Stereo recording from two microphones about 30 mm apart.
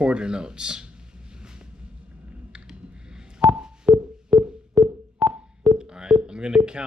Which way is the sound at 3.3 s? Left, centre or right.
Right.